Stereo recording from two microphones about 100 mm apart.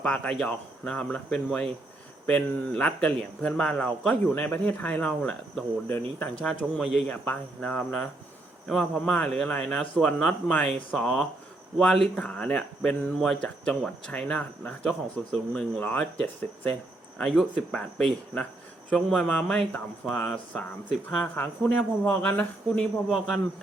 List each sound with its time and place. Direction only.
0.0 s speech: 10° left (ahead or behind)
6.4 s speech: 10° left (ahead or behind)
6.7 s speech: centre (ahead or behind)
7.1 s speech: 15° left (ahead or behind)
21.3 s speech: 20° left (ahead or behind)
23.0 s speech: centre (ahead or behind)